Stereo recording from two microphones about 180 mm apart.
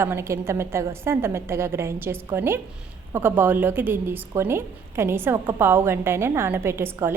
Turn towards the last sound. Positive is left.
turn(degrees=-15)  # may be behind; listen again after turning